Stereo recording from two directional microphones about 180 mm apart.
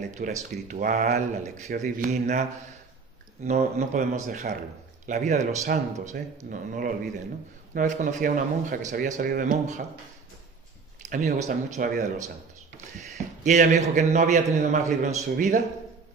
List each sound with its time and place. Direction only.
0.0 s a man's voice: 45° right (ahead or behind)
3.4 s a man's voice: 40° right (ahead or behind)
11.1 s a man's voice: 45° right (ahead or behind)
13.4 s a man's voice: 40° right (ahead or behind)